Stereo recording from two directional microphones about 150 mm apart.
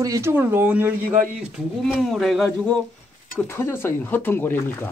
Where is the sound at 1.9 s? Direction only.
Centre (ahead or behind).